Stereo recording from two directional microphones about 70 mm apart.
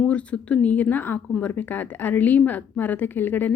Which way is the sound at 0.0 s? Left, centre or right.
Centre.